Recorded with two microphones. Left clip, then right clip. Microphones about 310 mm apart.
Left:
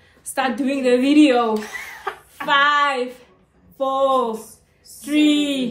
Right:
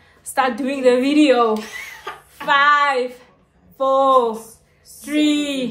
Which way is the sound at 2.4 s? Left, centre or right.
Centre.